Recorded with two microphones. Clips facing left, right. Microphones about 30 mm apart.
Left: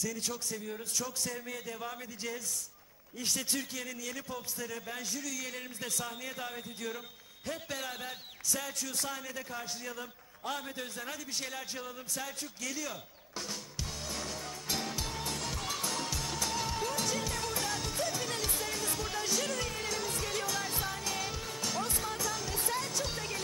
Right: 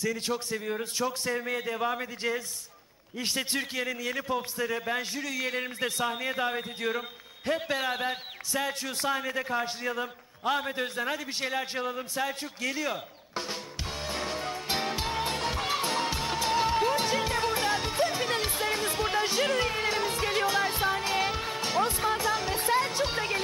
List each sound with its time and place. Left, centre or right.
0.0 s a man's voice: right
14.0 s music: right